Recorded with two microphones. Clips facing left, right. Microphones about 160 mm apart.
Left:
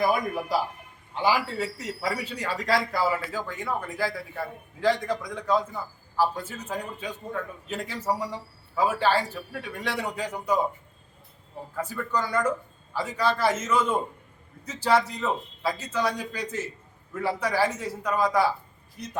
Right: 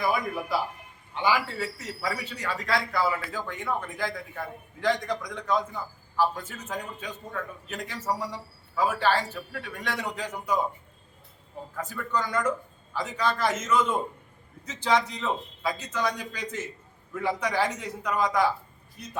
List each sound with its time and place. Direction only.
0.1 s a man's voice: 45° left (ahead or behind)
3.3 s a man's voice: 5° left (ahead or behind)
11.8 s a man's voice: 10° left (ahead or behind)